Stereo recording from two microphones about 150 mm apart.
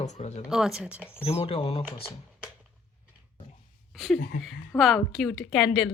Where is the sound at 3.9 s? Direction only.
Centre (ahead or behind).